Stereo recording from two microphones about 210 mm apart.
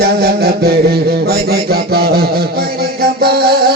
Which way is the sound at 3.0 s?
50° right (ahead or behind).